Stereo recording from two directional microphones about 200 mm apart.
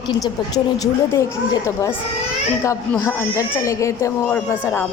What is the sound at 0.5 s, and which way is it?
Speech, 20° left (ahead or behind).